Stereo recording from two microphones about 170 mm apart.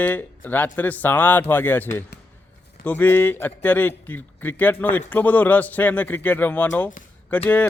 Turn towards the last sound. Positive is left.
turn(degrees=10)  # may be behind; listen again after turning